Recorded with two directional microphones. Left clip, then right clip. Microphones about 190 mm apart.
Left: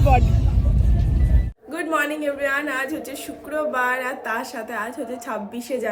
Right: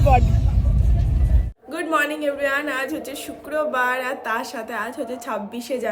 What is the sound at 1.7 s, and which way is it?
A woman's voice, 15° right (ahead or behind).